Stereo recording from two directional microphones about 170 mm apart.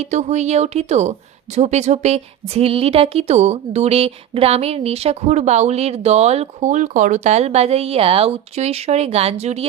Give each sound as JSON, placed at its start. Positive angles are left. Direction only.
{"t": 0.0, "sound": "a woman's voice", "side_deg": -40}